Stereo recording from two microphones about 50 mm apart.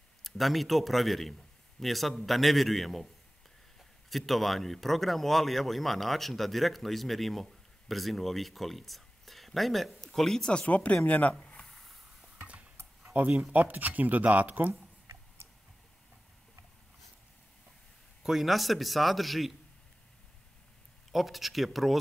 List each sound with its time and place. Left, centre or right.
0.2 s speech: centre
4.1 s speech: centre; by 11.3 s left
11.3 s a sound: centre
12.4 s stir: right
13.0 s a sound: right
13.5 s speech: right
18.2 s speech: centre
21.1 s speech: centre